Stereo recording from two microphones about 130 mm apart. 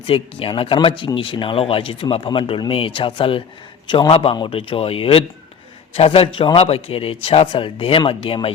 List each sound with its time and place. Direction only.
0.0 s speech: 45° left (ahead or behind)